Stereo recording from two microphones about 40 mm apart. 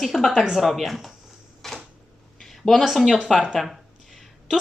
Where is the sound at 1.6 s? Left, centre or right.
Centre.